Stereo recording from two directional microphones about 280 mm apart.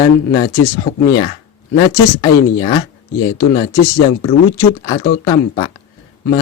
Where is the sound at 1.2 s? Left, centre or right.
Centre.